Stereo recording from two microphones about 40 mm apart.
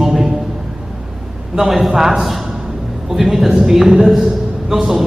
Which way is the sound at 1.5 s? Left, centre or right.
Centre.